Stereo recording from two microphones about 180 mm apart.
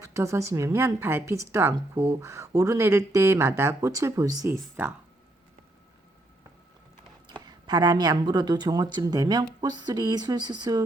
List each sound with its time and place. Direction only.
0.0 s a woman's voice: 15° right (ahead or behind)
7.3 s a woman's voice: 25° right (ahead or behind)